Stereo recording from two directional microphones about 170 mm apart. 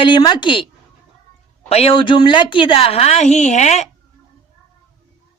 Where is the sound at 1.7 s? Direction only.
35° left (ahead or behind).